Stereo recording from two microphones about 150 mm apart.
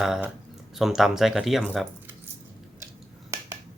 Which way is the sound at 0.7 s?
Centre (ahead or behind).